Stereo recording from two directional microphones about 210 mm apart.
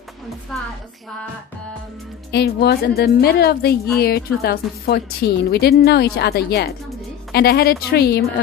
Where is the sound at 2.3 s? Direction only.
50° left (ahead or behind).